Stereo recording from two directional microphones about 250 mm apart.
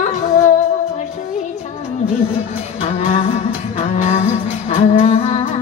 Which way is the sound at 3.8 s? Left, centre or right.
Left.